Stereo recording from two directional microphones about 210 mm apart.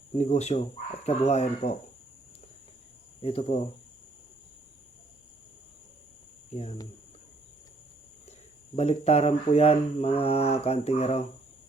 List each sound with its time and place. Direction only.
0.1 s speech: 30° left (ahead or behind)
3.2 s speech: 25° left (ahead or behind)
8.7 s speech: 30° left (ahead or behind)